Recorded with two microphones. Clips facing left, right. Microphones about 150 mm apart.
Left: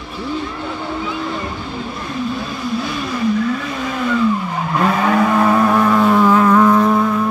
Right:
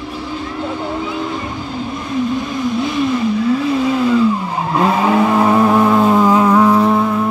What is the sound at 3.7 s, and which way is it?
Vehicle, 25° right (ahead or behind).